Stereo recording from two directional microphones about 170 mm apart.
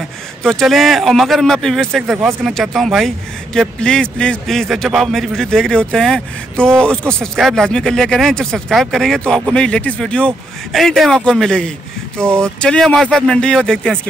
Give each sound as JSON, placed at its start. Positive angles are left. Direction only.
{"t": 0.4, "sound": "speech", "side_deg": 5}